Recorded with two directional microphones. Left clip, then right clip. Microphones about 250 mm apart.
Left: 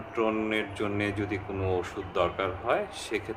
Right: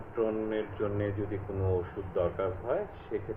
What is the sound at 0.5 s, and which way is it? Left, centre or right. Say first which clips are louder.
Speech: left 3 dB; centre.